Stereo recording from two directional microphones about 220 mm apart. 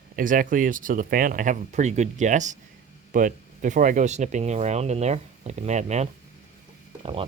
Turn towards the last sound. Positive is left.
turn(degrees=-25)  # may be behind; listen again after turning